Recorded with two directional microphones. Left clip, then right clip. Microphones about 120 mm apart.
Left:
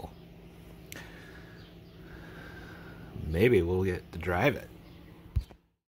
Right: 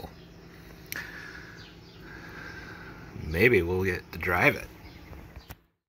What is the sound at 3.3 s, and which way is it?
Speech, 20° left (ahead or behind).